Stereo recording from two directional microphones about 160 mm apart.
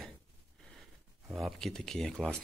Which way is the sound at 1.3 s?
Centre (ahead or behind).